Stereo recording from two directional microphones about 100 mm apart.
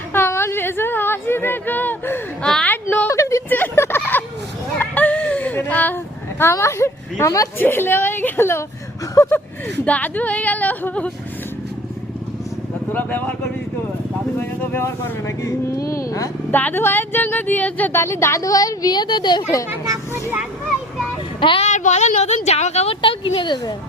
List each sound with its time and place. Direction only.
0.1 s a sound: 25° left (ahead or behind)
3.1 s a sound: 30° left (ahead or behind)
3.5 s a sound: 20° left (ahead or behind)
4.8 s chicken: 15° left (ahead or behind)
6.4 s speech: 25° left (ahead or behind)
9.8 s speech: 15° left (ahead or behind)
12.9 s speech: 15° left (ahead or behind)
14.3 s speech: 20° left (ahead or behind)
16.5 s speech: 20° left (ahead or behind)
18.0 s a woman's voice: 30° left (ahead or behind); by 19.5 s 50° left (ahead or behind)
21.4 s speech: 60° left (ahead or behind)
22.2 s speech: 90° left; by 23.7 s 50° left (ahead or behind)